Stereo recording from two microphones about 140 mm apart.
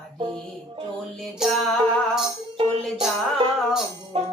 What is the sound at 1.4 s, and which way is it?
Music, centre (ahead or behind).